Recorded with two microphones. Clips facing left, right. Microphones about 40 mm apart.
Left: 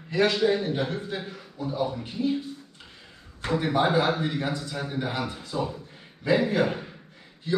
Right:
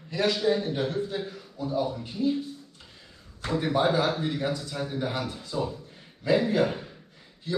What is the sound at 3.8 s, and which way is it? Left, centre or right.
A man's voice, left.